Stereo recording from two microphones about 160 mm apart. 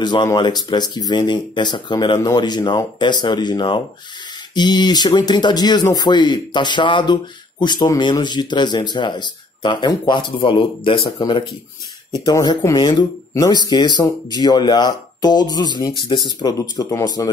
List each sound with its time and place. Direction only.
0.0 s speech: 25° left (ahead or behind)